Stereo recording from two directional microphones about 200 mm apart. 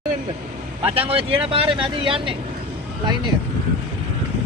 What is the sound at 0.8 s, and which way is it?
Speech, 25° right (ahead or behind).